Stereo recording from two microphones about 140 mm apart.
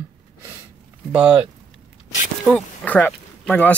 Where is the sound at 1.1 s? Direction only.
5° right (ahead or behind).